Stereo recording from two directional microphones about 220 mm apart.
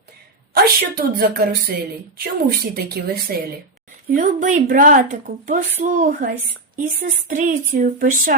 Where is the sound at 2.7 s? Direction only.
45° right (ahead or behind).